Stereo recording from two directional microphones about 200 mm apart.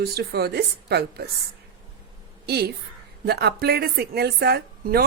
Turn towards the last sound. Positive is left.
turn(degrees=-50)  # may be behind; listen again after turning